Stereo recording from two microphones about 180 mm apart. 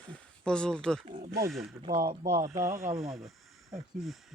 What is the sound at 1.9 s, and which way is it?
Speech, 50° right (ahead or behind).